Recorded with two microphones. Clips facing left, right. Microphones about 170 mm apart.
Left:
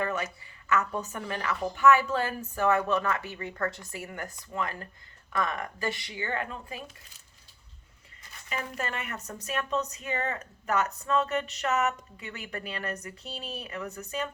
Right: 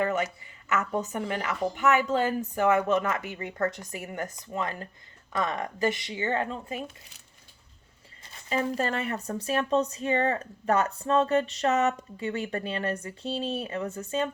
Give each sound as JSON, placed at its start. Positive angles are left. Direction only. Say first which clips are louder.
{"t": 0.0, "sound": "a sound", "louder": "right 4 dB", "side_deg": -20}
{"t": 0.7, "sound": "a woman's voice", "louder": "right 1 dB", "side_deg": -20}
{"t": 8.3, "sound": "speech", "louder": "right 8 dB", "side_deg": -30}